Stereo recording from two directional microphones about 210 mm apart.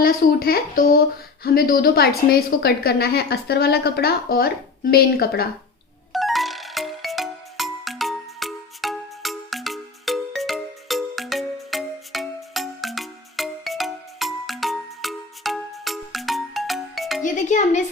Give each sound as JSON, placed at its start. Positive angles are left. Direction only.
{"t": 0.0, "sound": "a woman's voice", "side_deg": 45}
{"t": 6.1, "sound": "music", "side_deg": 0}
{"t": 17.2, "sound": "music", "side_deg": 35}